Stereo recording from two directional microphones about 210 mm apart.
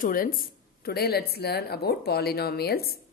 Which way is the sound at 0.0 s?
45° left (ahead or behind).